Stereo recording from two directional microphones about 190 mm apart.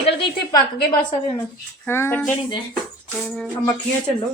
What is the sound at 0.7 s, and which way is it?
Speech, 45° left (ahead or behind).